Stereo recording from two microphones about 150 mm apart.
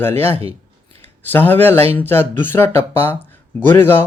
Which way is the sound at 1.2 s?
15° left (ahead or behind).